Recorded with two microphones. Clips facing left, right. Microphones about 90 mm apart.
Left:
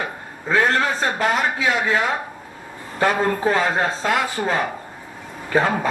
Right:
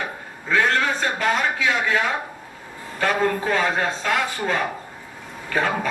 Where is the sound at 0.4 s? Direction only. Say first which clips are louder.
Left 2 dB; 35° left (ahead or behind).